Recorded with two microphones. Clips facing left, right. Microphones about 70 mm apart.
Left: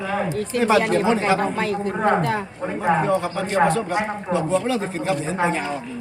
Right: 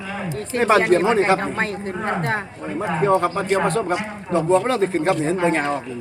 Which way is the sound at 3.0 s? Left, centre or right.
Right.